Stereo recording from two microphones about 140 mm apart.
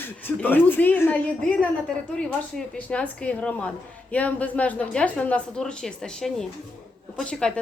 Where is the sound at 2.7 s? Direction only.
10° left (ahead or behind).